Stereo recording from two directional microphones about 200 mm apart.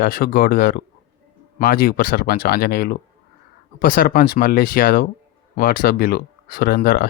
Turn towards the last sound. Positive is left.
turn(degrees=45)  # may be behind; listen again after turning